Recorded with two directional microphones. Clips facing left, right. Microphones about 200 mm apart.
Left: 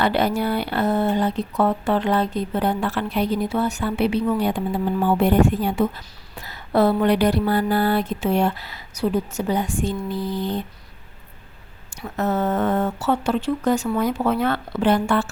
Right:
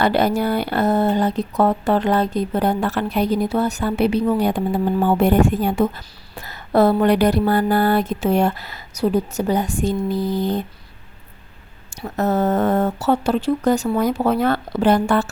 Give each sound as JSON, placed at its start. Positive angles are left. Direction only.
{"t": 0.0, "sound": "speech", "side_deg": -40}
{"t": 6.4, "sound": "a sound", "side_deg": -45}
{"t": 12.0, "sound": "speech", "side_deg": -40}